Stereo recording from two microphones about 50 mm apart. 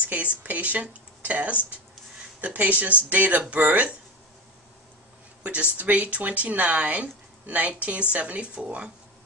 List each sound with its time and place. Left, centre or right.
0.4 s a woman's voice: right
5.4 s a woman's voice: right